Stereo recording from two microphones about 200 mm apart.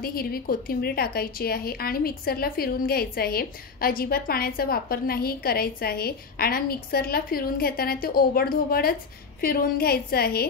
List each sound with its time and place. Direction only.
0.0 s speech: 50° left (ahead or behind)